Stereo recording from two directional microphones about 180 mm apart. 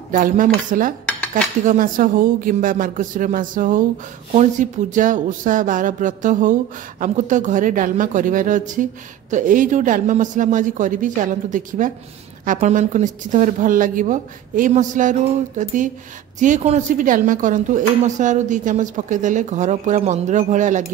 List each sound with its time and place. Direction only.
0.1 s speech: 50° right (ahead or behind)